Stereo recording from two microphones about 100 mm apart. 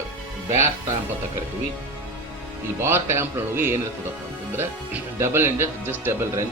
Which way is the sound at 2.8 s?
25° right (ahead or behind).